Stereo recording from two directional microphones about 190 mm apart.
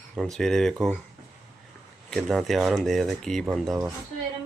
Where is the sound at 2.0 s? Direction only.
Centre (ahead or behind).